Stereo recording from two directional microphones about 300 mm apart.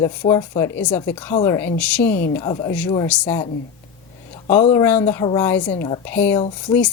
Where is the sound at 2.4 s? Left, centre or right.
Centre.